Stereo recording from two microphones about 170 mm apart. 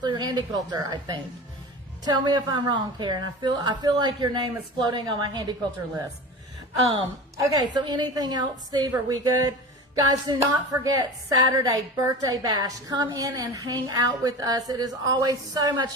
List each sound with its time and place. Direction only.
0.0 s a sound: 25° right (ahead or behind)
0.7 s a woman's voice: 25° right (ahead or behind)
7.3 s a woman's voice: 25° right (ahead or behind)